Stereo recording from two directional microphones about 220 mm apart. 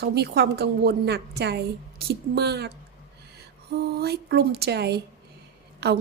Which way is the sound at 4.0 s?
45° right (ahead or behind).